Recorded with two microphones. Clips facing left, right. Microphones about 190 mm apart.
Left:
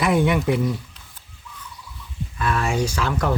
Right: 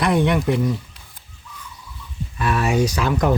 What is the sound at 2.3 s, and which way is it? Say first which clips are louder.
Speech: right 3 dB; 15° right (ahead or behind).